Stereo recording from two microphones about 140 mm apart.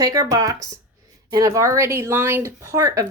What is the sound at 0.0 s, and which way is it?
Speech, 25° right (ahead or behind).